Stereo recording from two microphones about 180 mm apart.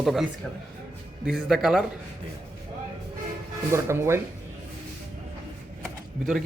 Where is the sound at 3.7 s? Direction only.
15° right (ahead or behind).